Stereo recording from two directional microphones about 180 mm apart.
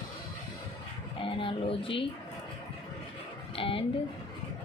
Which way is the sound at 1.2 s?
30° left (ahead or behind).